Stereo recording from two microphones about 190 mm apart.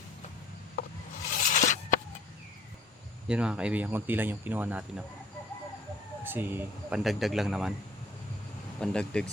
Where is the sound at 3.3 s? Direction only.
5° right (ahead or behind).